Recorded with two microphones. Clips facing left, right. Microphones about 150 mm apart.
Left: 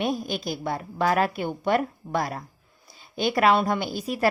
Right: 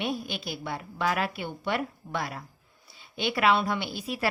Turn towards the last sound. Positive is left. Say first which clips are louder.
# left 5 dB
turn(degrees=45)  # may be behind; listen again after turning